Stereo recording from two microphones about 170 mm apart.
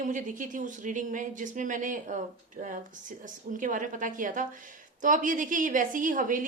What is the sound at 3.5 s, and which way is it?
A woman's voice, 50° right (ahead or behind).